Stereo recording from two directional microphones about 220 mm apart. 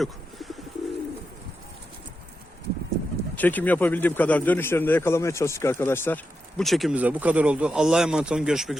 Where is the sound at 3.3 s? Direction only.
5° left (ahead or behind).